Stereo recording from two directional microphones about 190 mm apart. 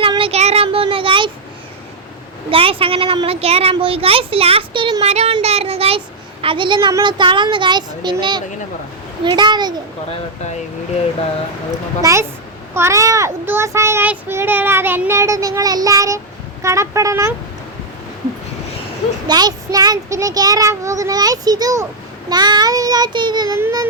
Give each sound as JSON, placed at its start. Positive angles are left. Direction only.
{"t": 0.0, "sound": "child singing", "side_deg": -30}
{"t": 2.5, "sound": "speech", "side_deg": -30}
{"t": 5.0, "sound": "child singing", "side_deg": -35}
{"t": 6.4, "sound": "speech", "side_deg": -25}
{"t": 12.7, "sound": "a child's voice", "side_deg": -15}
{"t": 19.3, "sound": "speech", "side_deg": -20}